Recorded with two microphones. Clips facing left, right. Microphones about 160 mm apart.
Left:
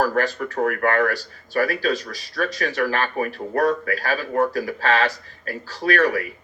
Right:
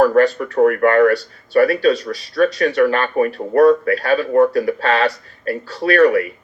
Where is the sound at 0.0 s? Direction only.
30° right (ahead or behind).